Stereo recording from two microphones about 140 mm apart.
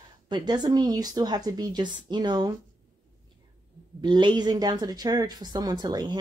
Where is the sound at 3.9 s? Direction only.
35° right (ahead or behind).